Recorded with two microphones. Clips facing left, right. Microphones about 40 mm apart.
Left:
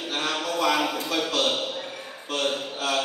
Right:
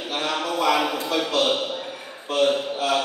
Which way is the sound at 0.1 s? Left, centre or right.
Centre.